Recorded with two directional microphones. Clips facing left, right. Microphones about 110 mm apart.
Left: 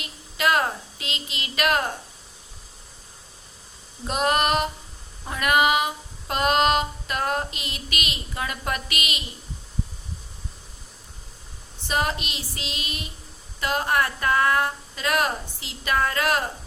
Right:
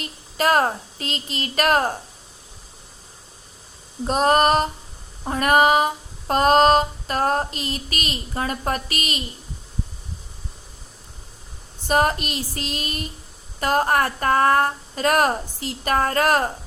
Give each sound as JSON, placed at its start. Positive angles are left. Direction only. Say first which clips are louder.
{"t": 0.0, "sound": "a woman's voice", "louder": "right 3 dB", "side_deg": -40}
{"t": 4.0, "sound": "female singing", "louder": "right 5 dB", "side_deg": -35}
{"t": 11.9, "sound": "speech", "louder": "right 6 dB", "side_deg": -45}